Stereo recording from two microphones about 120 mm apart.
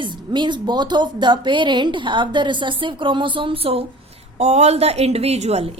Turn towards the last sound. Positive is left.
turn(degrees=-60)  # may be behind; listen again after turning